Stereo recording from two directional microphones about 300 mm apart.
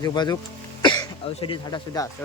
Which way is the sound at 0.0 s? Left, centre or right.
Centre.